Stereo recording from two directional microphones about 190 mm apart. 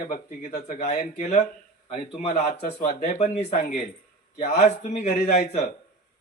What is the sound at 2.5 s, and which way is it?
Speech, 55° left (ahead or behind).